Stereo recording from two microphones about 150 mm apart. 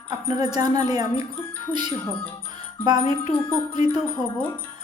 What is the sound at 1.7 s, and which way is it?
Speech, 10° left (ahead or behind).